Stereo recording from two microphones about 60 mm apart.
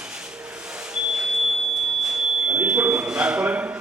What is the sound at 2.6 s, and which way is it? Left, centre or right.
Smoke detector, right.